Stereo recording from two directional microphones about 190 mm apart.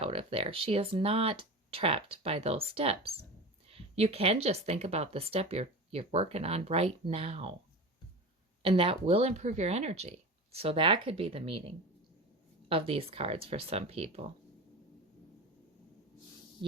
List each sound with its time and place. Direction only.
0.0 s speech: 30° right (ahead or behind)
8.6 s speech: 30° right (ahead or behind)